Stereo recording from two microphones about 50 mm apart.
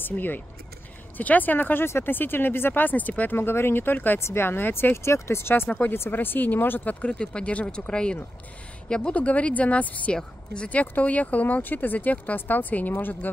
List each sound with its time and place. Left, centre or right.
0.0 s speech: left
3.3 s speech: left
4.2 s speech: left
4.9 s speech: left
5.9 s speech: left
7.1 s speech: centre
9.1 s speech: left
10.1 s speech: centre
10.7 s speech: left